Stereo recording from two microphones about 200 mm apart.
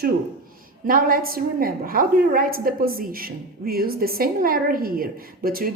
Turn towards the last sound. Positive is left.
turn(degrees=-45)  # may be behind; listen again after turning